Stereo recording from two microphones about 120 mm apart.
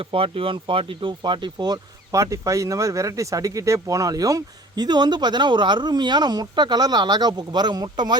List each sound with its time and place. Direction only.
0.0 s speech: 50° right (ahead or behind)